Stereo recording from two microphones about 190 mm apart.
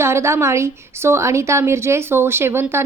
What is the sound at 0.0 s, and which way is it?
A woman's voice, 15° right (ahead or behind).